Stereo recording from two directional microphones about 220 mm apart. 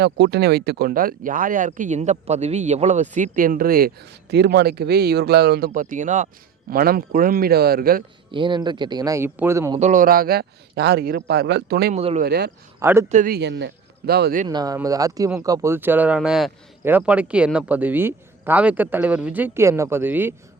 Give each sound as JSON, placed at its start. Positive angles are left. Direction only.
{"t": 0.0, "sound": "speech", "side_deg": -50}
{"t": 8.3, "sound": "a man's voice", "side_deg": -20}
{"t": 9.7, "sound": "a man's voice", "side_deg": -35}
{"t": 11.9, "sound": "a man's voice", "side_deg": -30}
{"t": 12.2, "sound": "a man's voice", "side_deg": -45}
{"t": 12.8, "sound": "a man's voice", "side_deg": -10}
{"t": 13.1, "sound": "a man's voice", "side_deg": -35}
{"t": 14.4, "sound": "speech", "side_deg": -20}